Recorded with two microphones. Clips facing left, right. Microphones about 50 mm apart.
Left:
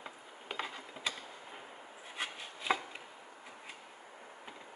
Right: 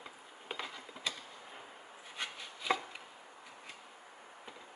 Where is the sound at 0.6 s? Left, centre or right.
Centre.